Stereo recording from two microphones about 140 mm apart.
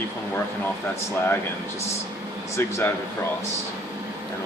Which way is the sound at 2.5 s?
20° left (ahead or behind).